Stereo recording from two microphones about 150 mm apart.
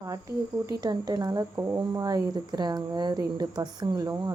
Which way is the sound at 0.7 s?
25° right (ahead or behind).